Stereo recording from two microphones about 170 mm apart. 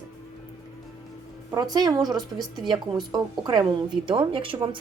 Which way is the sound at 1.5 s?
20° right (ahead or behind).